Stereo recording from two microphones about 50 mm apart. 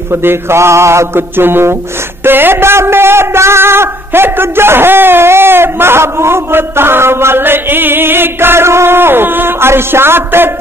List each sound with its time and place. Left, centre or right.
0.1 s mantra: right
1.3 s a man's voice: right